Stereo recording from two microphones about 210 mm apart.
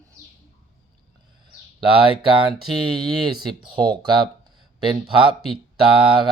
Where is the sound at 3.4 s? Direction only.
20° right (ahead or behind).